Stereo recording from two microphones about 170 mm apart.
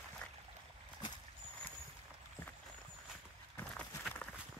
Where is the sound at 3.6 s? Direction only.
10° left (ahead or behind).